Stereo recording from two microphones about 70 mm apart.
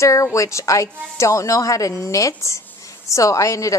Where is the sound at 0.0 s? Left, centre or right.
Left.